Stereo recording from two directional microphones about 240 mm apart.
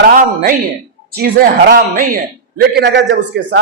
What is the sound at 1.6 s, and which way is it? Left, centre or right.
A man's voice, right.